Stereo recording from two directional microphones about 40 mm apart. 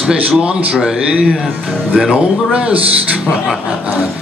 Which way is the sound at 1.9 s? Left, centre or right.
Centre.